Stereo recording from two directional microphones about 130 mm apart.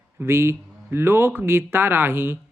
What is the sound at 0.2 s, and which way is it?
Speech, 20° right (ahead or behind).